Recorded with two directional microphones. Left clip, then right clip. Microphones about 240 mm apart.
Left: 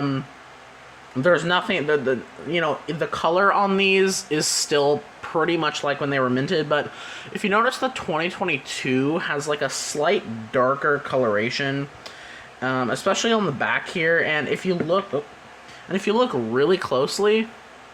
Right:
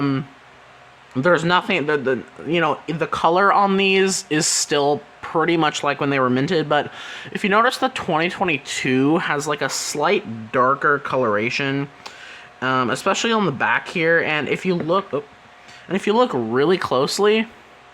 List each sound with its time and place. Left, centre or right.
1.2 s speech: right